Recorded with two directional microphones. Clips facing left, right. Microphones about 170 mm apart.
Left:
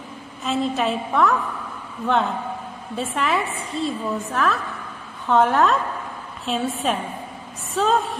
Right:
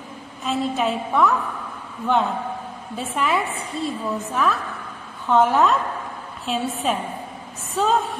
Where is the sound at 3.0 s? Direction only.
Centre (ahead or behind).